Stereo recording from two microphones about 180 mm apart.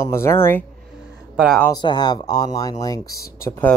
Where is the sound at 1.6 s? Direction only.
20° left (ahead or behind).